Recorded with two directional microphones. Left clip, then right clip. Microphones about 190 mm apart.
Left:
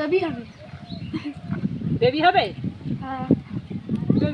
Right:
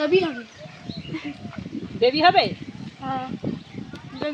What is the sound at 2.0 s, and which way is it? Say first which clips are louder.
Speech: right 1 dB; 15° right (ahead or behind).